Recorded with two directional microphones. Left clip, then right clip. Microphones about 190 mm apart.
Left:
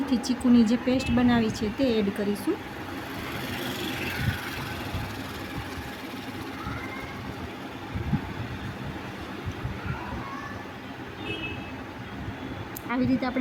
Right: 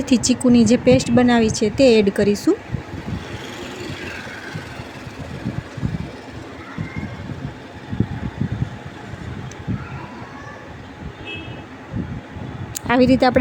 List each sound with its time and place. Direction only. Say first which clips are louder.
0.0 s speech: right 9 dB; 35° right (ahead or behind)
12.9 s speech: right 13 dB; 35° right (ahead or behind)